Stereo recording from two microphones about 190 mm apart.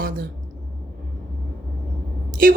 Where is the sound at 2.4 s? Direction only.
50° right (ahead or behind).